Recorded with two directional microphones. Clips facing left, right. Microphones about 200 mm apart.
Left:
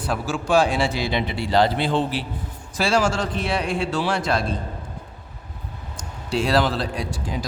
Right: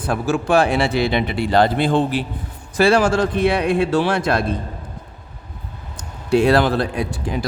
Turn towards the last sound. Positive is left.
turn(degrees=-60)  # may be behind; listen again after turning